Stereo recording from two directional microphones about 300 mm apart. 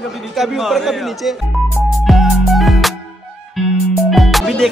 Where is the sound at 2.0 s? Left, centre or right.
Centre.